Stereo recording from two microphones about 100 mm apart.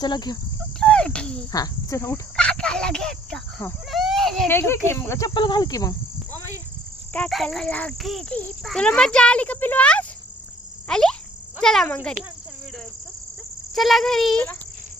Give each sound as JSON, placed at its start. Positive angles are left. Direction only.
{"t": 0.0, "sound": "cricket", "side_deg": 45}
{"t": 0.8, "sound": "cricket", "side_deg": 10}
{"t": 1.5, "sound": "speech", "side_deg": 35}
{"t": 2.3, "sound": "a child's voice", "side_deg": 10}
{"t": 3.8, "sound": "children playing", "side_deg": 0}
{"t": 4.4, "sound": "speech", "side_deg": 25}
{"t": 5.3, "sound": "cricket", "side_deg": 50}
{"t": 7.3, "sound": "a child's voice", "side_deg": 0}
{"t": 10.8, "sound": "insect", "side_deg": 5}
{"t": 11.6, "sound": "speech", "side_deg": 5}
{"t": 13.7, "sound": "speech", "side_deg": 0}